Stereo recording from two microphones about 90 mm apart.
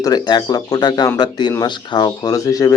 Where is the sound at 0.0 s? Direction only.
50° left (ahead or behind).